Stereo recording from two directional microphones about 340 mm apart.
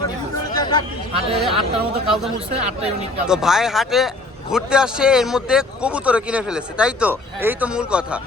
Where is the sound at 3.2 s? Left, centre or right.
Centre.